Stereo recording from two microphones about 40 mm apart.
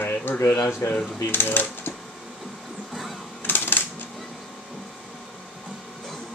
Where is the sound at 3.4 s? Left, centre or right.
Left.